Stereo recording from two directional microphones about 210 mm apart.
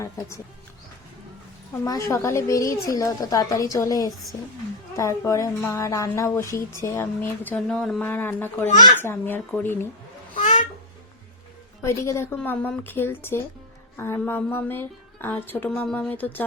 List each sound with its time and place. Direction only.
1.8 s a woman's voice: 15° left (ahead or behind)
10.3 s a sound: 35° left (ahead or behind)
11.8 s a woman's voice: 15° left (ahead or behind)